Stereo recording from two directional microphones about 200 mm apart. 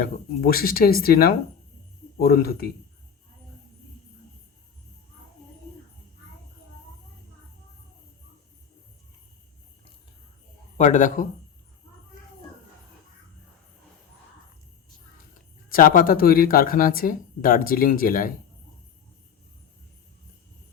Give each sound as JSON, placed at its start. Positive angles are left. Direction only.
{"t": 0.0, "sound": "speech", "side_deg": 45}
{"t": 10.8, "sound": "speech", "side_deg": 40}
{"t": 15.7, "sound": "speech", "side_deg": 45}